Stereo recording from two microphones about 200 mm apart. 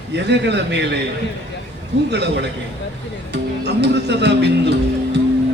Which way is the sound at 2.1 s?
55° right (ahead or behind).